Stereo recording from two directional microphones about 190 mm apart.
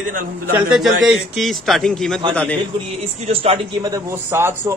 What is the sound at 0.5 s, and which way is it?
A man's voice, 5° right (ahead or behind).